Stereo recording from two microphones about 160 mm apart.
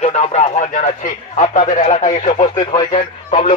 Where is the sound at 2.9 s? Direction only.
45° left (ahead or behind).